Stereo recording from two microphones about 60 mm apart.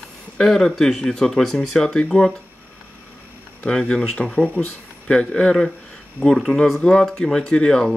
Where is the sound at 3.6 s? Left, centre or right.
Centre.